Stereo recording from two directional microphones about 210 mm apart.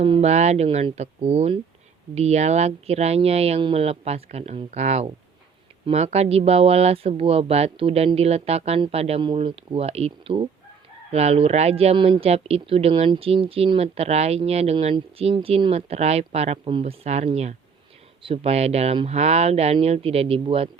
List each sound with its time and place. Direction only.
0.0 s speech: 30° right (ahead or behind)